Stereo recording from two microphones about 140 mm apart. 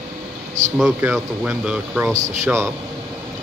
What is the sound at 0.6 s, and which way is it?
Speech, 60° right (ahead or behind).